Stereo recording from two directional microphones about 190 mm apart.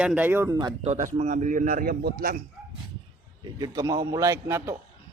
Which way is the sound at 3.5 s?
20° right (ahead or behind).